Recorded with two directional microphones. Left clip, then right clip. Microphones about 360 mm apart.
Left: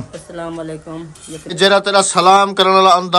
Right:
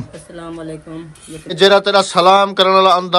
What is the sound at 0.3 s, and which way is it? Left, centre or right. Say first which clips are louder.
Speech: left 3 dB; centre.